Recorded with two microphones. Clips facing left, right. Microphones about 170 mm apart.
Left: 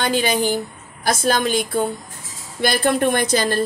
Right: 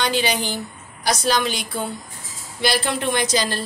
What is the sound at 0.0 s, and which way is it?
Speech, 50° left (ahead or behind).